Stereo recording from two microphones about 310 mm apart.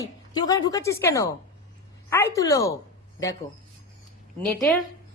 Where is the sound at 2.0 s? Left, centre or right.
Centre.